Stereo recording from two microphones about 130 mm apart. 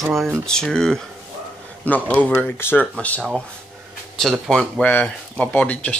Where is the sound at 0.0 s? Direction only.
Centre (ahead or behind).